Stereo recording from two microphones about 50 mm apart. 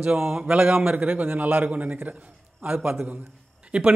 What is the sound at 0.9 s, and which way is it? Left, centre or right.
Speech, right.